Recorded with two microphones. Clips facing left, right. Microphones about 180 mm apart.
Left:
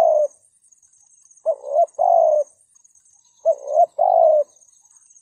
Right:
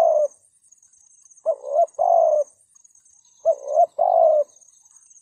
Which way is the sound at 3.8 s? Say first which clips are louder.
Left 2 dB; 35° left (ahead or behind).